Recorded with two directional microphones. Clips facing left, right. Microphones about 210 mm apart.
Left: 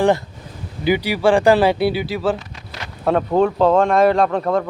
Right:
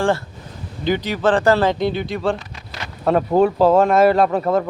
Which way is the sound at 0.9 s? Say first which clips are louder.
Left 2 dB; 10° left (ahead or behind).